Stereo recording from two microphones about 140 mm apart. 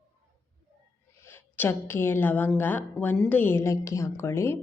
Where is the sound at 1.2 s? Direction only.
15° left (ahead or behind).